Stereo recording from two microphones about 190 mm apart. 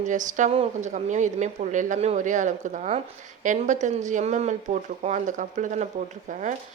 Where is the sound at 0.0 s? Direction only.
40° right (ahead or behind).